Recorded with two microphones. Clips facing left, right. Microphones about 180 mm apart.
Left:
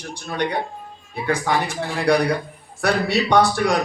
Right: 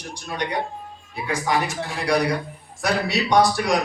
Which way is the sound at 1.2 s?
60° left (ahead or behind).